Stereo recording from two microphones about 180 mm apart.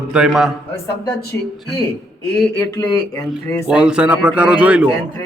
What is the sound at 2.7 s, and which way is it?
Speech, 20° left (ahead or behind).